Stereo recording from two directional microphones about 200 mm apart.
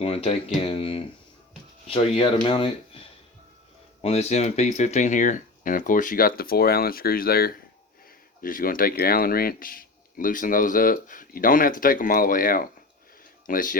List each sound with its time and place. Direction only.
0.0 s speech: 30° left (ahead or behind)